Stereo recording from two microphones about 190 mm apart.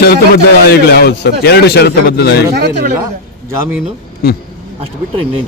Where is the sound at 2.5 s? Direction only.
60° right (ahead or behind).